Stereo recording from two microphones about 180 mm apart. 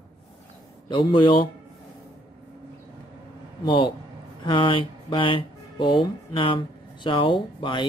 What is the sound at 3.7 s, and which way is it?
Speech, 25° left (ahead or behind).